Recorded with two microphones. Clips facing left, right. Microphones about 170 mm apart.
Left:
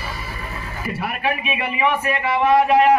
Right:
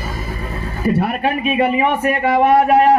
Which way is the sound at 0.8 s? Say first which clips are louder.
Right 8 dB; 40° right (ahead or behind).